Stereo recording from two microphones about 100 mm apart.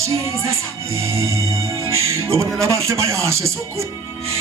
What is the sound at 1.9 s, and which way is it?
Music, 30° right (ahead or behind).